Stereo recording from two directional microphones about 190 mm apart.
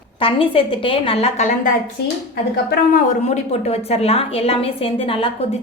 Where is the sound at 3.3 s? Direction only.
35° left (ahead or behind).